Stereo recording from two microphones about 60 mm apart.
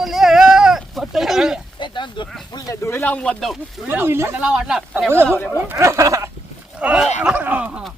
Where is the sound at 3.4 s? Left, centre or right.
Centre.